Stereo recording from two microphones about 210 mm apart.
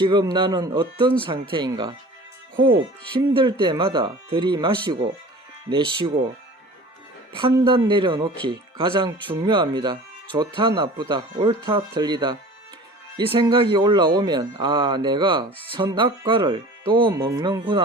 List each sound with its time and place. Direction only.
0.0 s speech: 20° right (ahead or behind)
7.3 s speech: 25° right (ahead or behind)